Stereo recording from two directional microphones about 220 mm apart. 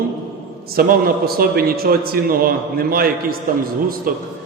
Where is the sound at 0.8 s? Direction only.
45° right (ahead or behind).